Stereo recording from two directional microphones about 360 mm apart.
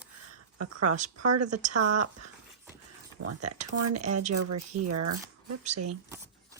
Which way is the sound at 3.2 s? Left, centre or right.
Right.